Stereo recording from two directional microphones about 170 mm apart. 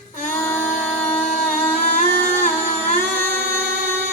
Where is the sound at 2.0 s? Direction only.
50° left (ahead or behind).